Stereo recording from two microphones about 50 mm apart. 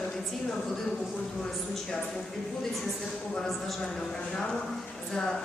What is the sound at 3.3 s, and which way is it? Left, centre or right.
Speech, centre.